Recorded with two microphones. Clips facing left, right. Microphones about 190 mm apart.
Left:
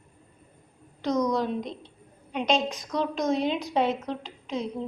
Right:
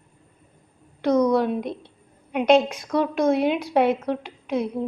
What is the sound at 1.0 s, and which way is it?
A woman's voice, 60° right (ahead or behind).